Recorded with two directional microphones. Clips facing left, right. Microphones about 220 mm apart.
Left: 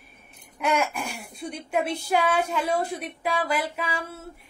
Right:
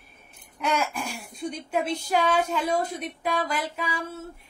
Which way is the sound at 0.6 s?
10° left (ahead or behind).